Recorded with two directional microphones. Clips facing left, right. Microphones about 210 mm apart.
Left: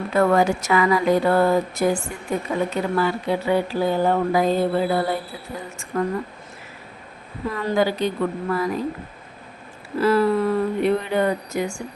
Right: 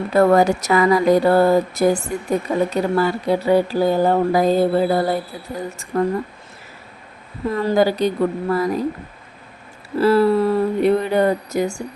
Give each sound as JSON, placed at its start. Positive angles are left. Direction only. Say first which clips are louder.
{"t": 0.1, "sound": "speech", "louder": "right 4 dB", "side_deg": -40}
{"t": 7.5, "sound": "speech", "louder": "right 4 dB", "side_deg": -35}
{"t": 10.0, "sound": "speech", "louder": "right 4 dB", "side_deg": -35}